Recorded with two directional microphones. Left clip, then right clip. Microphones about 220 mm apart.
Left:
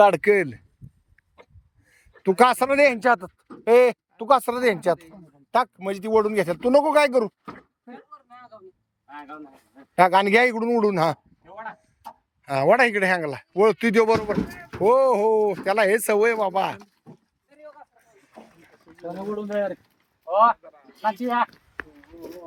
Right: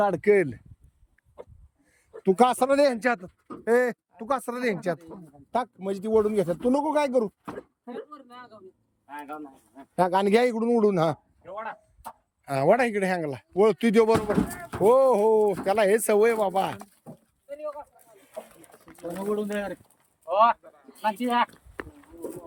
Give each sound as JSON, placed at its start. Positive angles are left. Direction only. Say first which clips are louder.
{"t": 0.2, "sound": "speech", "louder": "left 2 dB", "side_deg": -5}
{"t": 1.9, "sound": "speech", "louder": "left 1 dB", "side_deg": 0}
{"t": 9.9, "sound": "speech", "louder": "left 5 dB", "side_deg": 0}
{"t": 12.5, "sound": "speech", "louder": "left 4 dB", "side_deg": -5}
{"t": 14.4, "sound": "speech", "louder": "right 2 dB", "side_deg": -25}
{"t": 14.7, "sound": "speech", "louder": "left 1 dB", "side_deg": -10}
{"t": 19.4, "sound": "speech", "louder": "left 4 dB", "side_deg": 30}